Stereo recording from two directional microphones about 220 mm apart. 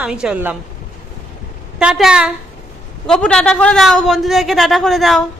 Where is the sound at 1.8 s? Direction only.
5° right (ahead or behind).